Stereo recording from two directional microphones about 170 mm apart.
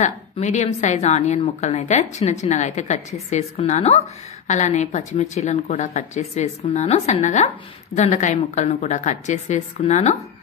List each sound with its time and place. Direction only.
0.0 s speech: 45° left (ahead or behind)